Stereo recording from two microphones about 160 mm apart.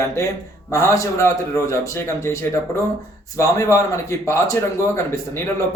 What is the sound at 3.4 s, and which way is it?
A man's voice, 20° left (ahead or behind).